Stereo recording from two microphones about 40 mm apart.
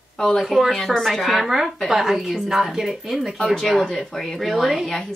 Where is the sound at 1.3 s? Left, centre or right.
Centre.